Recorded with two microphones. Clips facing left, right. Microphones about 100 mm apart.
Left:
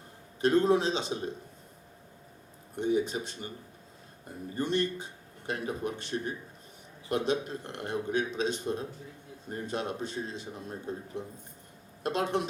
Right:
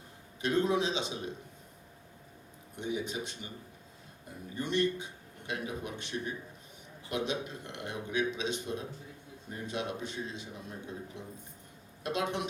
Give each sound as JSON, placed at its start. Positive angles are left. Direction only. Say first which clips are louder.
{"t": 0.4, "sound": "a man's voice", "louder": "left 5 dB", "side_deg": 40}
{"t": 2.7, "sound": "a man's voice", "louder": "left 7 dB", "side_deg": 35}
{"t": 4.5, "sound": "a man's voice", "louder": "left 1 dB", "side_deg": 35}